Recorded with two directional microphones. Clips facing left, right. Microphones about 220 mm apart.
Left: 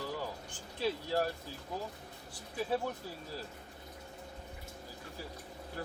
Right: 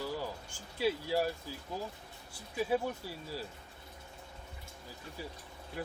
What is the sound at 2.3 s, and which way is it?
Speech, 10° right (ahead or behind).